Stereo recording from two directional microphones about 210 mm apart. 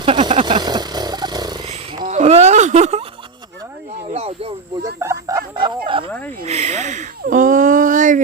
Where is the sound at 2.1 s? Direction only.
30° right (ahead or behind).